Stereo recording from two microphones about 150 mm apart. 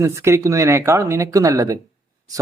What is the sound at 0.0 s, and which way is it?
Speech, 20° right (ahead or behind).